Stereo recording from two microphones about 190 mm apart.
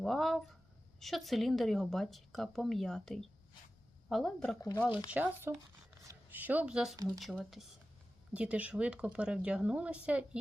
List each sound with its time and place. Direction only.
0.0 s a woman's voice: centre (ahead or behind)
4.9 s speech: 25° left (ahead or behind)
5.1 s a woman's voice: 10° right (ahead or behind)